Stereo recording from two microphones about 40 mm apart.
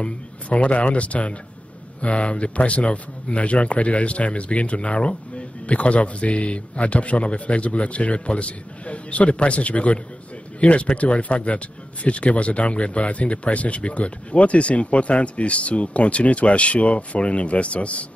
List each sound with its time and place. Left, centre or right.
0.0 s speech: left